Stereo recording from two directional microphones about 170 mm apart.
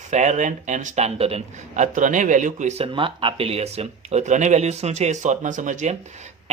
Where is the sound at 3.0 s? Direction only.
30° right (ahead or behind).